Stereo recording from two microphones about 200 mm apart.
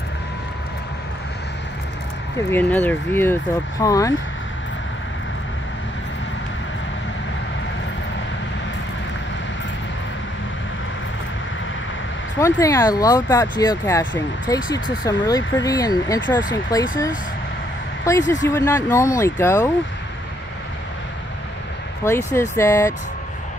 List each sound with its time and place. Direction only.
2.5 s speech: 10° left (ahead or behind)
12.4 s speech: 15° left (ahead or behind)
18.0 s speech: 15° left (ahead or behind)
22.0 s speech: 15° left (ahead or behind)